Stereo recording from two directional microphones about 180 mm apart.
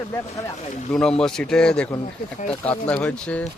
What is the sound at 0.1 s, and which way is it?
Speech, 15° left (ahead or behind).